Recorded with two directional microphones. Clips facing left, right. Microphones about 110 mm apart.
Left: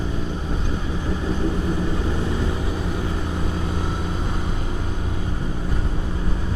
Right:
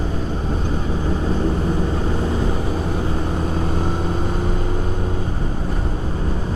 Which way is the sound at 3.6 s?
40° right (ahead or behind).